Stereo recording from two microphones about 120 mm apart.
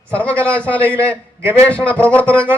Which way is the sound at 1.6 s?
10° left (ahead or behind).